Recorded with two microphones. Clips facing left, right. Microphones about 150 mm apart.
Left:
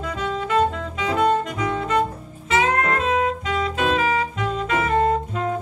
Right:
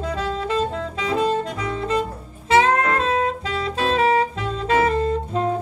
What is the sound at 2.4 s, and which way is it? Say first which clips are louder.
Saxophone: right 3 dB; 35° right (ahead or behind).